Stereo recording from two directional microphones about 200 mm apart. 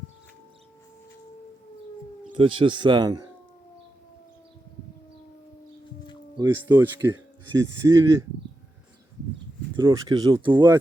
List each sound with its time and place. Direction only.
2.3 s speech: 25° right (ahead or behind)
6.3 s speech: 15° right (ahead or behind)
9.7 s speech: 15° right (ahead or behind)